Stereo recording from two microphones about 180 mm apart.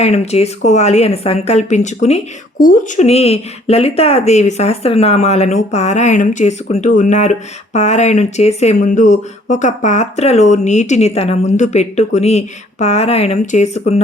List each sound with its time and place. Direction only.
0.0 s speech: 35° left (ahead or behind)